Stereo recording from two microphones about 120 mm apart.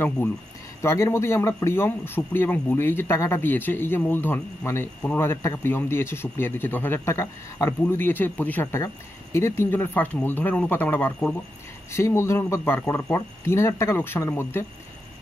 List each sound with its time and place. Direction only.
0.8 s speech: 25° left (ahead or behind)